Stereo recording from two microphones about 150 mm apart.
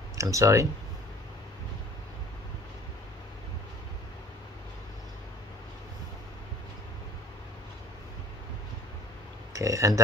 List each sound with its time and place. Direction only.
0.2 s speech: 20° right (ahead or behind)
9.5 s speech: 20° right (ahead or behind)